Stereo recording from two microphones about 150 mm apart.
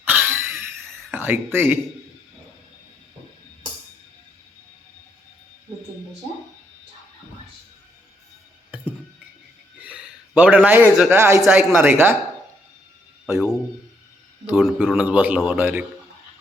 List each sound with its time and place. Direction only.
0.0 s cough: 15° right (ahead or behind)
1.1 s speech: 15° right (ahead or behind)
9.7 s a sound: 10° right (ahead or behind)
11.1 s speech: 15° right (ahead or behind)
14.6 s a man's voice: centre (ahead or behind)
14.9 s speech: 10° right (ahead or behind)